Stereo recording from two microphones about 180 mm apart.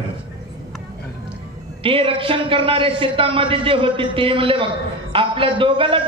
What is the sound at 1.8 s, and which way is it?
A man's voice, 30° right (ahead or behind).